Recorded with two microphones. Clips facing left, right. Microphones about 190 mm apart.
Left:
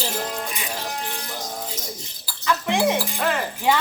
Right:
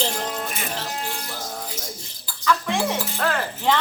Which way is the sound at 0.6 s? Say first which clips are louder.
Right 1 dB; 15° left (ahead or behind).